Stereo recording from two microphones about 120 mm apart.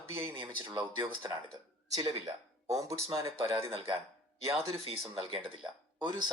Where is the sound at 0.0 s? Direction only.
20° right (ahead or behind).